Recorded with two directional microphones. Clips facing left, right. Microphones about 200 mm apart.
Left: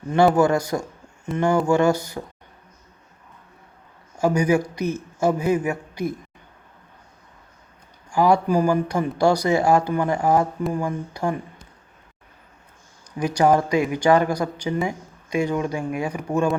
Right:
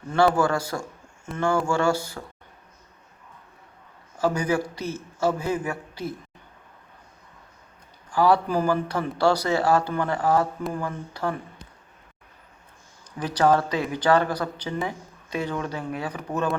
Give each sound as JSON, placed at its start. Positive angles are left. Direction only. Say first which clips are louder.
{"t": 0.3, "sound": "speech", "louder": "left 5 dB", "side_deg": 20}
{"t": 4.2, "sound": "speech", "louder": "left 4 dB", "side_deg": 15}
{"t": 8.1, "sound": "speech", "louder": "left 3 dB", "side_deg": 15}
{"t": 13.1, "sound": "speech", "louder": "left 3 dB", "side_deg": 10}